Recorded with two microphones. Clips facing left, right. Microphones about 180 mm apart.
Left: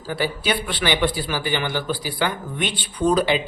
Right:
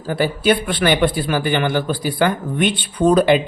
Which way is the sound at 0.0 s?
50° right (ahead or behind).